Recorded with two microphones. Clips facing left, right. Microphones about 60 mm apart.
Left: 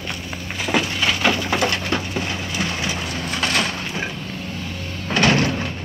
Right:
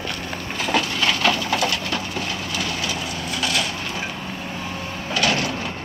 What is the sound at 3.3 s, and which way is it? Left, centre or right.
Splinter, left.